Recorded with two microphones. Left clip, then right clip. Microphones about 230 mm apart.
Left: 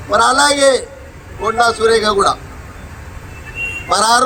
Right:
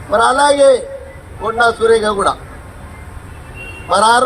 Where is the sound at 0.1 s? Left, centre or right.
Left.